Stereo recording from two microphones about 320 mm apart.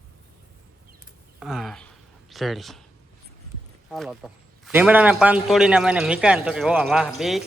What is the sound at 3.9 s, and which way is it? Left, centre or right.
A man's voice, centre.